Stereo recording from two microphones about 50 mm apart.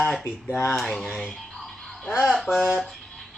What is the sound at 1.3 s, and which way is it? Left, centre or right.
Music, centre.